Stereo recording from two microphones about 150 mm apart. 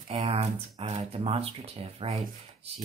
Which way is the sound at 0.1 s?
45° right (ahead or behind).